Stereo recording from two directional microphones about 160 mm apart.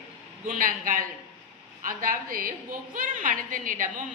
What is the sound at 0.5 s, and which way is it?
A woman's voice, 55° right (ahead or behind).